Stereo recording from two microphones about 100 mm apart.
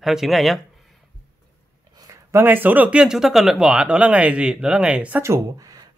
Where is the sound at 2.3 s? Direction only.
20° right (ahead or behind).